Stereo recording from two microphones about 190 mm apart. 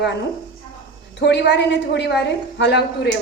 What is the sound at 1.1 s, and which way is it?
A woman's voice, 65° left (ahead or behind).